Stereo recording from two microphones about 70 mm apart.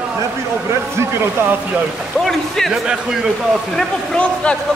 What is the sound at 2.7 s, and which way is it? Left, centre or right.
Speech, centre.